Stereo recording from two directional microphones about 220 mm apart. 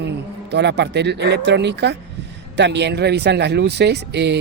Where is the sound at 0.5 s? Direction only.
50° right (ahead or behind).